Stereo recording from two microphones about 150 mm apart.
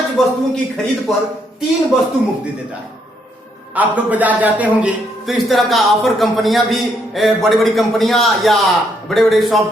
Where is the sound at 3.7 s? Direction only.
10° right (ahead or behind).